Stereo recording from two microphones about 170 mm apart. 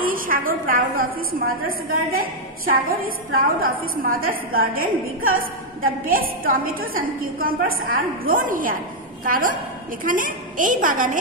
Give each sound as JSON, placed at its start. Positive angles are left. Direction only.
{"t": 0.0, "sound": "a woman's voice", "side_deg": -55}